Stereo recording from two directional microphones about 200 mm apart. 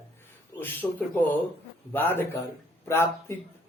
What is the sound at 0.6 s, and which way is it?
Speech, 10° left (ahead or behind).